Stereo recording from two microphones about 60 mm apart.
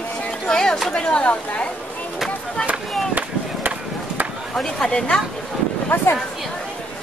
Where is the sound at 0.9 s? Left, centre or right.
Centre.